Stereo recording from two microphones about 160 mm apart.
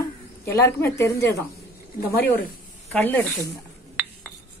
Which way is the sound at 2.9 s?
10° left (ahead or behind).